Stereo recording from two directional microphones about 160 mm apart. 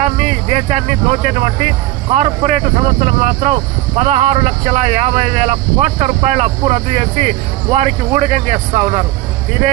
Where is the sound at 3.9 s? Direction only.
45° right (ahead or behind).